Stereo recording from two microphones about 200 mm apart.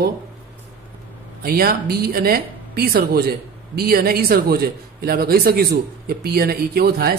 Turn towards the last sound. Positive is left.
turn(degrees=-50)  # may be behind; listen again after turning